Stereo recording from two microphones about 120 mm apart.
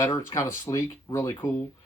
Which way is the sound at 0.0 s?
25° left (ahead or behind).